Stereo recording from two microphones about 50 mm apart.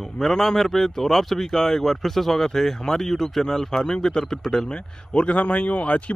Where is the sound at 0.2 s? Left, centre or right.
Centre.